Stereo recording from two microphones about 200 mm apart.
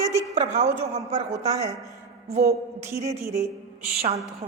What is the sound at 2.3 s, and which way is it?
Speech, 30° right (ahead or behind).